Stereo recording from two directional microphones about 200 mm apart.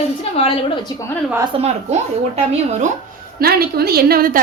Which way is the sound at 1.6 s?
30° right (ahead or behind).